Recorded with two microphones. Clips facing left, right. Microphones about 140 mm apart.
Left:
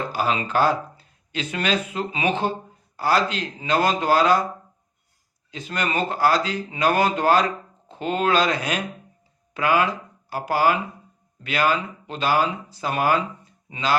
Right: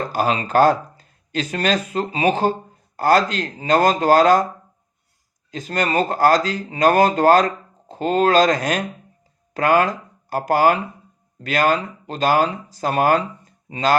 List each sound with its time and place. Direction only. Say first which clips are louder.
0.1 s speech: right 5 dB; 45° right (ahead or behind)
5.5 s speech: right 5 dB; 45° right (ahead or behind)